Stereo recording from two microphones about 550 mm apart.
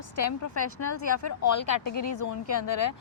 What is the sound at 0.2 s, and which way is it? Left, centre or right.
A woman's voice, left.